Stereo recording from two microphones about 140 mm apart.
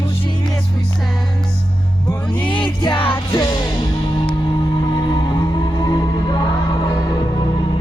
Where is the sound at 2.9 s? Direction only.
40° left (ahead or behind).